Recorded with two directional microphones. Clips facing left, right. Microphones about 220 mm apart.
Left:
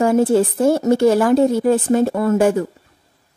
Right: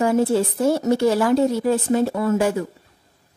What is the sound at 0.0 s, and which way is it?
Speech, 50° left (ahead or behind).